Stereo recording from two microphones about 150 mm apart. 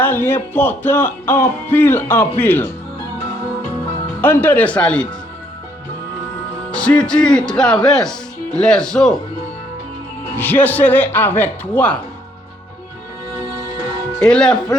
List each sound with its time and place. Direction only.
0.0 s speech: 15° left (ahead or behind)
4.2 s speech: 15° left (ahead or behind)
6.7 s speech: 5° left (ahead or behind)
10.3 s speech: 10° left (ahead or behind)
14.2 s speech: 5° left (ahead or behind)